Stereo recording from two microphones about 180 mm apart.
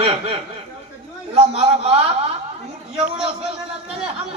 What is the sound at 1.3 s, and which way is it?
Speech, 35° right (ahead or behind).